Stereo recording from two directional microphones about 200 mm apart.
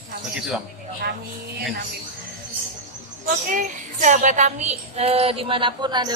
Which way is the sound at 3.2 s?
40° right (ahead or behind).